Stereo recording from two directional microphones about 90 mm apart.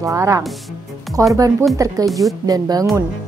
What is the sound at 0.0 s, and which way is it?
A woman's voice, 35° right (ahead or behind).